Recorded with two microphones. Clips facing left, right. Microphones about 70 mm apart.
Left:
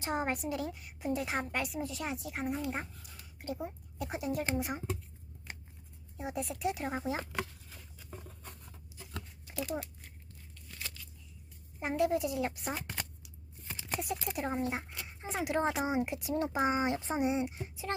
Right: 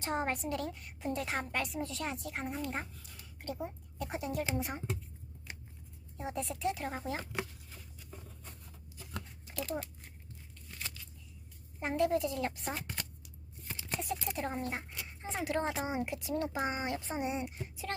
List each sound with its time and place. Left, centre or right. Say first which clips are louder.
0.0 s a woman's voice: left 1 dB; centre
6.1 s speech: left 1 dB; centre
9.5 s a child's voice: left 1 dB; centre
11.8 s speech: even; centre; by 17.9 s left